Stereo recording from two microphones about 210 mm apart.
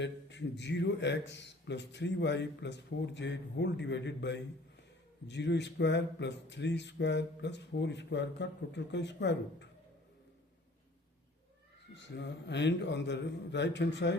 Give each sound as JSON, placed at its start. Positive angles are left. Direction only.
{"t": 0.0, "sound": "a man's voice", "side_deg": 55}
{"t": 11.9, "sound": "a man's voice", "side_deg": 55}